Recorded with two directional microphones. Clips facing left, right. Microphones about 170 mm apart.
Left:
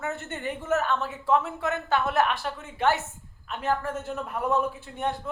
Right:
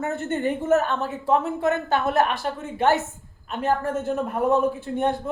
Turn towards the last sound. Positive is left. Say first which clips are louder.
# right 7 dB
turn(degrees=-45)  # may be behind; listen again after turning